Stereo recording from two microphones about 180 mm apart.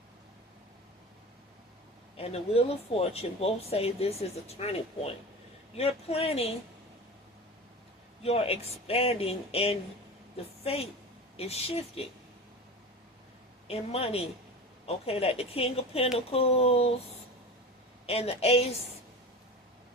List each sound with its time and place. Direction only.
2.1 s speech: 35° left (ahead or behind)
8.2 s a woman's voice: 35° left (ahead or behind)
13.7 s speech: 35° left (ahead or behind)
18.0 s speech: 35° left (ahead or behind)